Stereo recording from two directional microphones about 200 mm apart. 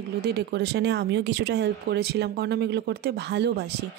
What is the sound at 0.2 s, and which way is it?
Speech, 55° right (ahead or behind).